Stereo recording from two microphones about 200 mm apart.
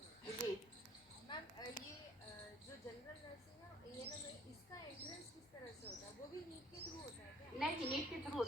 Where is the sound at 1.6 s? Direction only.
20° left (ahead or behind).